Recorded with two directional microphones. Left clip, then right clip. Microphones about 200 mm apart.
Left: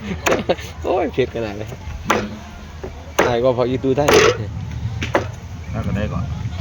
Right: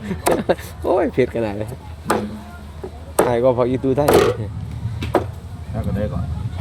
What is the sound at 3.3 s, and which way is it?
Speech, 10° right (ahead or behind).